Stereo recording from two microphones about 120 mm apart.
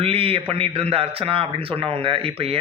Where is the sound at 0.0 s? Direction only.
55° right (ahead or behind).